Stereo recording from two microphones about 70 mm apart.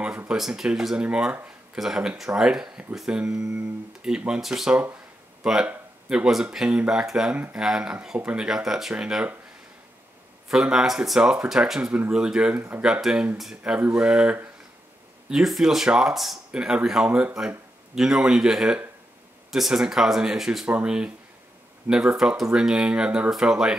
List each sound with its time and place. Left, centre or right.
0.3 s speech: centre
8.5 s speech: centre
10.5 s speech: centre
12.5 s speech: right
12.8 s speech: centre